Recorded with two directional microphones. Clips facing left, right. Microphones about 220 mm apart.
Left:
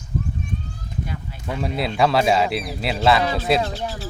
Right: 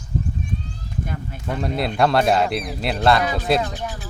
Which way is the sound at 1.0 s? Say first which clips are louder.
Right 2 dB; 50° right (ahead or behind).